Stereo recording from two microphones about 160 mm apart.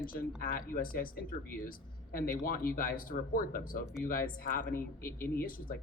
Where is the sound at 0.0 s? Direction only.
65° left (ahead or behind).